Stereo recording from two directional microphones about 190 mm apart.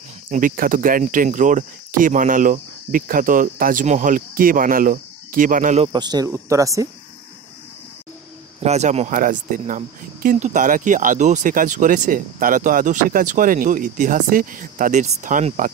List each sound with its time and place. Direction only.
0.3 s speech: 45° right (ahead or behind)
5.9 s speech: 20° right (ahead or behind)
8.5 s speech: 35° right (ahead or behind)